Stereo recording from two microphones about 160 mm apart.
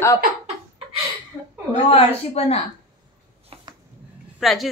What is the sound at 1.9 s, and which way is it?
Speech, 40° left (ahead or behind).